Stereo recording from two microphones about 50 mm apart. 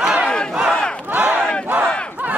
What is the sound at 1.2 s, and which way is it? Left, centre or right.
Battle cry, right.